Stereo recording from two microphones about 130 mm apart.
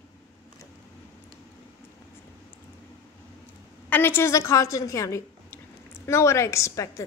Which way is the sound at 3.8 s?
15° left (ahead or behind).